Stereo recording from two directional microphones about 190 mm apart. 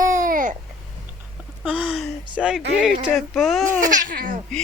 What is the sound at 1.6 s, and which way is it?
Speech, 5° right (ahead or behind).